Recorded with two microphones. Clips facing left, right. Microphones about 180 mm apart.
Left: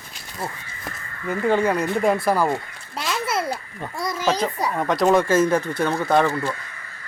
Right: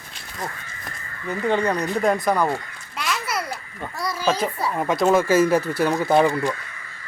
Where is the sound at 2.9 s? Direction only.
25° left (ahead or behind).